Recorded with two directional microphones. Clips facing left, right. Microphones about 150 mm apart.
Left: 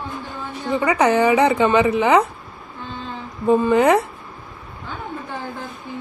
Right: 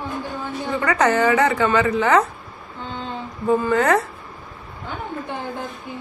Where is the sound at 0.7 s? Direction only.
10° left (ahead or behind).